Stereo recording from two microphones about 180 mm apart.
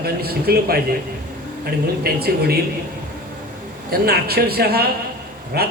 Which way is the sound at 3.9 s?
60° right (ahead or behind).